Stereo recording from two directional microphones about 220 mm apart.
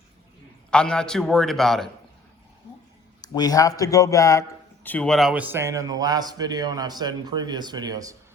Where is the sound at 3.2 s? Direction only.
15° left (ahead or behind).